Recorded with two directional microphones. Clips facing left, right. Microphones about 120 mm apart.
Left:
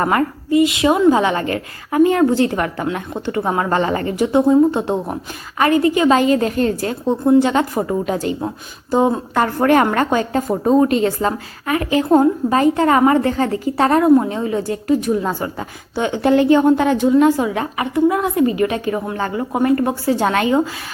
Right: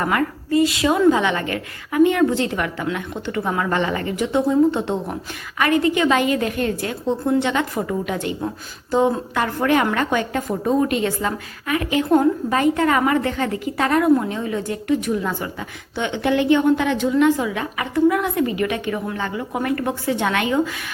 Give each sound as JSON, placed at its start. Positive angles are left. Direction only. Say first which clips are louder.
{"t": 0.0, "sound": "a woman's voice", "louder": "left 4 dB", "side_deg": 35}
{"t": 9.3, "sound": "a woman's voice", "louder": "left 5 dB", "side_deg": 40}
{"t": 19.5, "sound": "a woman's voice", "louder": "left 7 dB", "side_deg": 30}